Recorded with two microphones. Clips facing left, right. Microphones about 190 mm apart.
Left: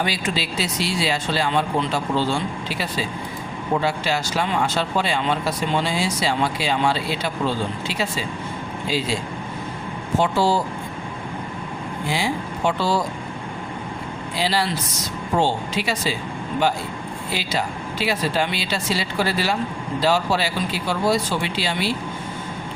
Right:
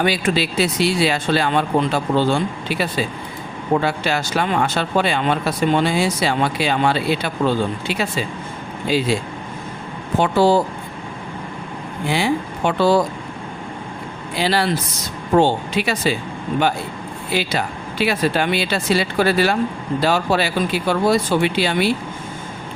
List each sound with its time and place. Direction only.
0.0 s speech: 60° right (ahead or behind)
10.2 s speech: 55° right (ahead or behind)
12.0 s speech: 60° right (ahead or behind)
14.3 s speech: 60° right (ahead or behind)
17.3 s speech: 60° right (ahead or behind)